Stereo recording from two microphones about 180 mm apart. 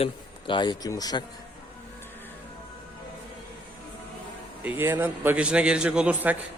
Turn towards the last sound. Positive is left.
turn(degrees=-10)  # may be behind; listen again after turning